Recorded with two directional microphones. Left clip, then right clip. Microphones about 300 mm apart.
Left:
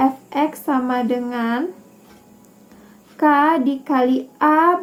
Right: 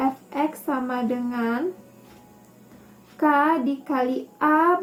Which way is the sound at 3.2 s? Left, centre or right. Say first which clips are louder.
Left 5 dB; left.